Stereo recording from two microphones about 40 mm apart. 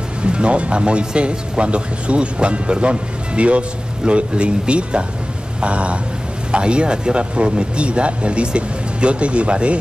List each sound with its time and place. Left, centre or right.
0.2 s speech: right